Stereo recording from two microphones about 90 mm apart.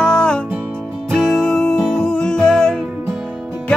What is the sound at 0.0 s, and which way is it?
Music, 10° left (ahead or behind).